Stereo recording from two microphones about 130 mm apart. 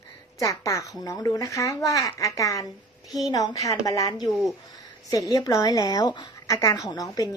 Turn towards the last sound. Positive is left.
turn(degrees=30)  # may be behind; listen again after turning